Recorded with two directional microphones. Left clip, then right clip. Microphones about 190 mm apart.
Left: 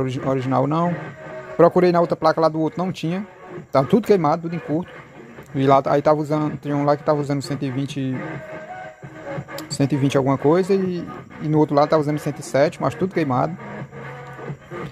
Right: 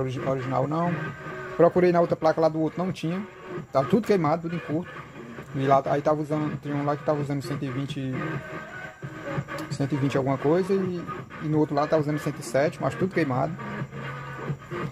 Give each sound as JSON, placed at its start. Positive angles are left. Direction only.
{"t": 0.0, "sound": "speech", "side_deg": 45}
{"t": 1.6, "sound": "speech", "side_deg": 25}
{"t": 5.6, "sound": "a man's voice", "side_deg": 40}
{"t": 9.6, "sound": "a sound", "side_deg": 45}
{"t": 10.0, "sound": "a man's voice", "side_deg": 30}